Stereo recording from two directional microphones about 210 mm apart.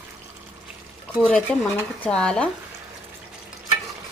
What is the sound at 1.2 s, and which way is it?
Speech, 5° left (ahead or behind).